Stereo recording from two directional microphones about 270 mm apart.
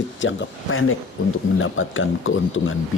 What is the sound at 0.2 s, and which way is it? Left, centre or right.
Speech, left.